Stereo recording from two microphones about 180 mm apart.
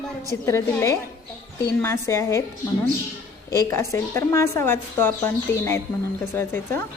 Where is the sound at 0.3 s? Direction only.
15° left (ahead or behind).